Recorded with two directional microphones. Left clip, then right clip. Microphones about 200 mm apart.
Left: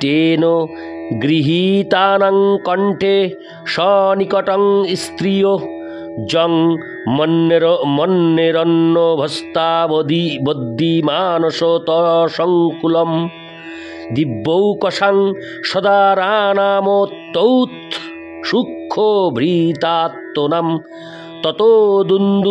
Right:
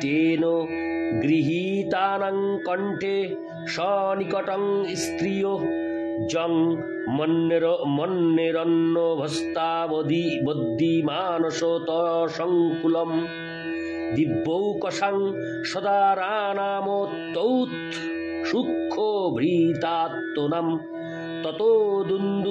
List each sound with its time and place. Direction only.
0.0 s mantra: 60° left (ahead or behind)